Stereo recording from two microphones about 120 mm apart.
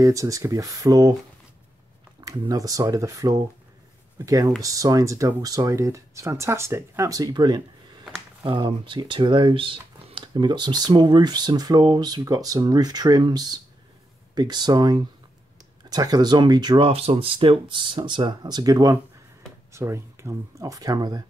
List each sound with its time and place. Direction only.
0.0 s speech: 25° right (ahead or behind)
2.2 s speech: 30° right (ahead or behind)